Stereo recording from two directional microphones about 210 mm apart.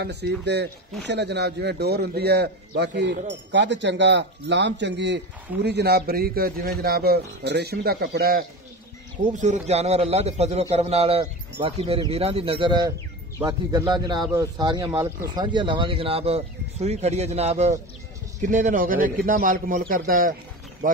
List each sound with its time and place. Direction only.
0.0 s a man's voice: 55° right (ahead or behind)
9.3 s a man's voice: 35° right (ahead or behind)